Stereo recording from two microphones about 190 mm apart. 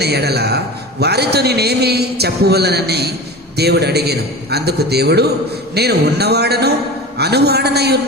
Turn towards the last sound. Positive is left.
turn(degrees=-60)  # may be behind; listen again after turning